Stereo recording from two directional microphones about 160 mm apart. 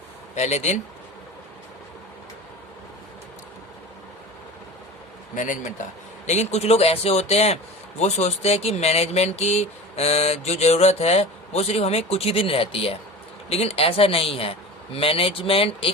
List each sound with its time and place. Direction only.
0.3 s speech: 45° left (ahead or behind)
5.3 s speech: 55° left (ahead or behind); by 15.9 s 35° left (ahead or behind)